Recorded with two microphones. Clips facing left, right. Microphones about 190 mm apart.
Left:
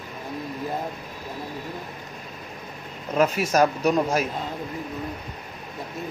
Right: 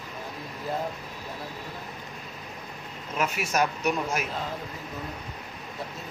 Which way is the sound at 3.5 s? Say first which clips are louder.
Left 6 dB; 35° left (ahead or behind).